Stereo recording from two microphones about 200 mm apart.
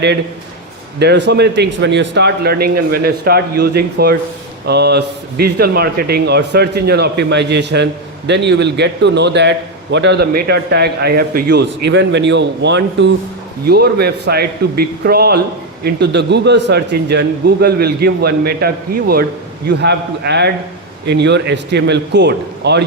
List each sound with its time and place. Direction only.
0.9 s a man's voice: 60° right (ahead or behind)